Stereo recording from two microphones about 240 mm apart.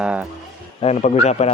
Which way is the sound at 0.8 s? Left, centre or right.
Left.